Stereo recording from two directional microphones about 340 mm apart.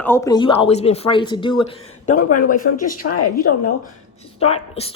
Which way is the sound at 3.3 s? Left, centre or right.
Left.